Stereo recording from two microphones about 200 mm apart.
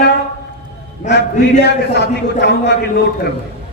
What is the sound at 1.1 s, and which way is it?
A man's voice, 55° left (ahead or behind).